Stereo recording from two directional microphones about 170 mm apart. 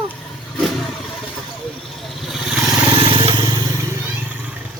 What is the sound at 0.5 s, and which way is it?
Vehicle, centre (ahead or behind).